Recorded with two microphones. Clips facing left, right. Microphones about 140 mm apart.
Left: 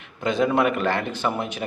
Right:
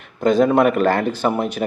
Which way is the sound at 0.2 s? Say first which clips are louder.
Right 6 dB; 40° right (ahead or behind).